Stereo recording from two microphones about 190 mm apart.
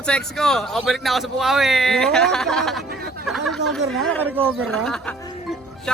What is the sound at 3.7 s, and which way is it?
Speech, 5° left (ahead or behind).